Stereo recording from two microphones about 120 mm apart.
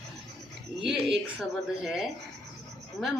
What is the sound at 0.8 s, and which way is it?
A woman's voice, 5° right (ahead or behind).